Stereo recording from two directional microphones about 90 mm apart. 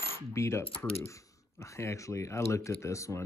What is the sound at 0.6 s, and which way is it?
Speech, 90° left.